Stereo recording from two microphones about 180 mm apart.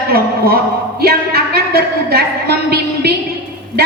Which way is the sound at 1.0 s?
60° right (ahead or behind).